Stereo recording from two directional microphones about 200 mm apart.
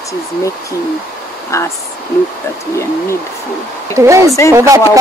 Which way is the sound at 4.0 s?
15° right (ahead or behind).